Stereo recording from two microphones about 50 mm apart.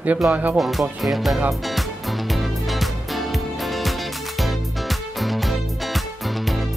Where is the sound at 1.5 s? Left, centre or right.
Centre.